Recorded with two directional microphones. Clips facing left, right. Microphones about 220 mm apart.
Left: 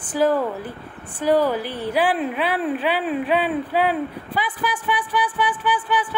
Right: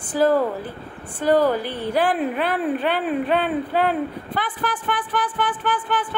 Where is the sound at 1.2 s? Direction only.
10° left (ahead or behind).